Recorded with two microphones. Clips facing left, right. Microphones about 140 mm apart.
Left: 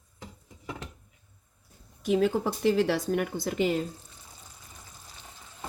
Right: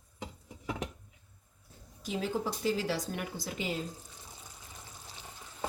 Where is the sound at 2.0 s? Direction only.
60° left (ahead or behind).